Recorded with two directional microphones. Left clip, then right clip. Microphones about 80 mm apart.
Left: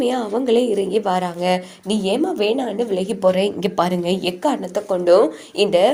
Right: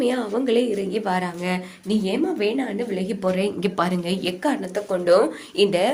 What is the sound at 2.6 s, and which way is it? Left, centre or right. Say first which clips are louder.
Speech: left 5 dB; left.